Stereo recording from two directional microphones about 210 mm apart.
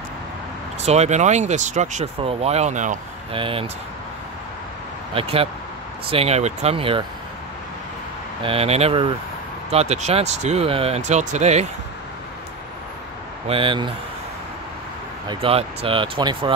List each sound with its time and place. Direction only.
0.8 s speech: 30° right (ahead or behind)
3.3 s speech: 25° right (ahead or behind)
5.1 s speech: 25° right (ahead or behind)
8.4 s speech: 25° right (ahead or behind)
13.5 s speech: 25° right (ahead or behind)
15.2 s speech: 25° right (ahead or behind)